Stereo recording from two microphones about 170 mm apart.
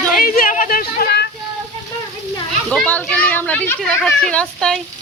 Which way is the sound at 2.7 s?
5° left (ahead or behind).